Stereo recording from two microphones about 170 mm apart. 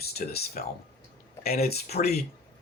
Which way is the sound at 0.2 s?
50° left (ahead or behind).